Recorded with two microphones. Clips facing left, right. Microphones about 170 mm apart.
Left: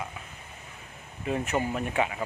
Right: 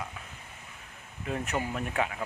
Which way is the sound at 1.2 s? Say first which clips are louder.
Left 4 dB; 5° left (ahead or behind).